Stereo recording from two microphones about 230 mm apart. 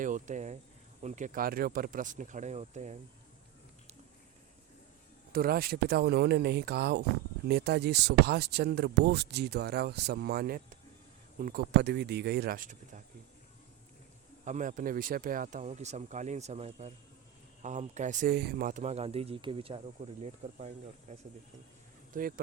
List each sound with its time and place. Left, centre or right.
0.0 s speech: right
5.3 s speech: right
14.4 s speech: right